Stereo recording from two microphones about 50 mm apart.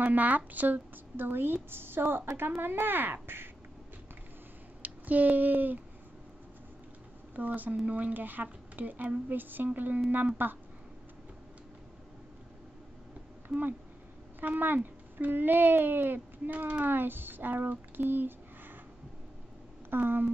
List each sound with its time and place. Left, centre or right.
0.0 s a woman's voice: right
4.8 s speech: right
7.3 s speech: right
14.4 s speech: right
19.9 s a woman's voice: right